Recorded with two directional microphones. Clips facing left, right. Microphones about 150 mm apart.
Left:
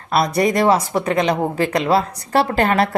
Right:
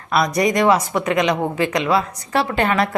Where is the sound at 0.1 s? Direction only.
30° left (ahead or behind).